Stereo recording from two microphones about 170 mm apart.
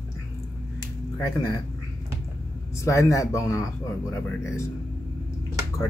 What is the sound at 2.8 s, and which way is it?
Speech, 15° left (ahead or behind).